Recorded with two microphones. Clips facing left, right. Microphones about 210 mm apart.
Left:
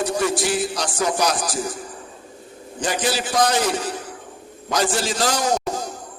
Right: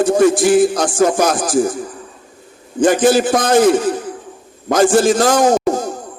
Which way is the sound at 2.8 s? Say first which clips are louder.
Right 12 dB; 50° right (ahead or behind).